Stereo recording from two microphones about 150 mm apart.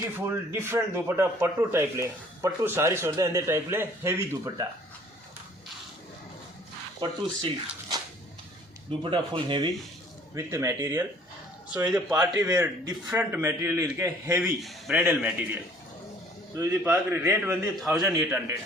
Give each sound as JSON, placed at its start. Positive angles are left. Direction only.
{"t": 0.2, "sound": "a man's voice", "side_deg": -15}
{"t": 7.0, "sound": "speech", "side_deg": -30}
{"t": 10.3, "sound": "a man's voice", "side_deg": -20}
{"t": 14.4, "sound": "a man's voice", "side_deg": -5}